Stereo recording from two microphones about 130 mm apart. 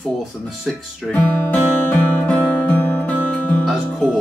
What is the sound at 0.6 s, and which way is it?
Speech, centre (ahead or behind).